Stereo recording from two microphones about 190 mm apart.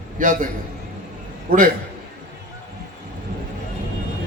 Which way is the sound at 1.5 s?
45° right (ahead or behind).